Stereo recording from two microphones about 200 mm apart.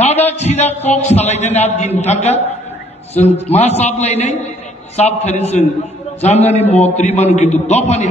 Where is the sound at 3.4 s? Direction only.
35° left (ahead or behind).